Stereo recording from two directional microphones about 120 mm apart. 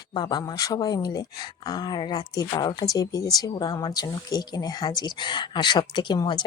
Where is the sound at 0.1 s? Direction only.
35° left (ahead or behind).